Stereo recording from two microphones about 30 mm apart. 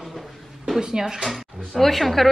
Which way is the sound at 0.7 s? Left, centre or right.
Centre.